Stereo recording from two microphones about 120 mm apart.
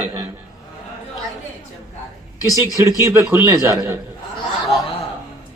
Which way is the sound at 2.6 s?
25° right (ahead or behind).